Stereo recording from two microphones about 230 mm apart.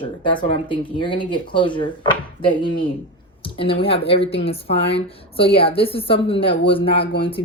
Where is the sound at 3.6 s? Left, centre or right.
Left.